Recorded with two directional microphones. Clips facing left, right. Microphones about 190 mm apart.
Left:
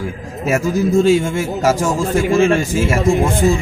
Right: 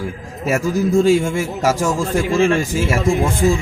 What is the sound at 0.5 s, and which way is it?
A man's voice, centre (ahead or behind).